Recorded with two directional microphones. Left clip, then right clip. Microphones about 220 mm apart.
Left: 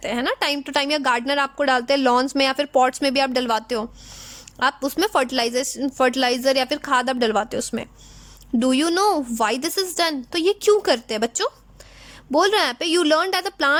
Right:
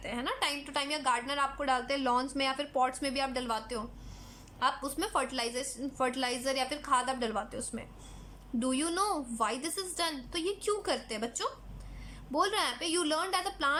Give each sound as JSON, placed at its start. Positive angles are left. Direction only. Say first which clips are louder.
{"t": 0.0, "sound": "a woman's voice", "louder": "left 11 dB", "side_deg": 45}